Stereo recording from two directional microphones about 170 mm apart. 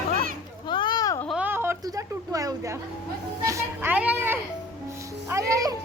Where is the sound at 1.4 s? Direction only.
10° right (ahead or behind).